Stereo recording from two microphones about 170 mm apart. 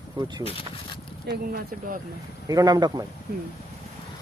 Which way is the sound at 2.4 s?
20° right (ahead or behind).